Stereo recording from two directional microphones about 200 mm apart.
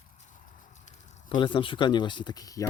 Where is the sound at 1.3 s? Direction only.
25° left (ahead or behind).